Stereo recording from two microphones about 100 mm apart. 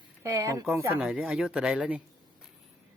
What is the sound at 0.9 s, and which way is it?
Speech, 10° right (ahead or behind).